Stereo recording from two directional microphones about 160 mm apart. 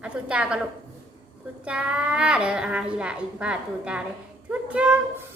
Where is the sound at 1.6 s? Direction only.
5° right (ahead or behind).